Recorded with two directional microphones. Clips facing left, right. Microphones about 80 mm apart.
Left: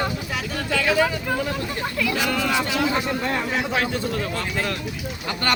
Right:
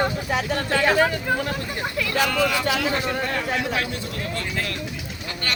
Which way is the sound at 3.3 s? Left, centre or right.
Left.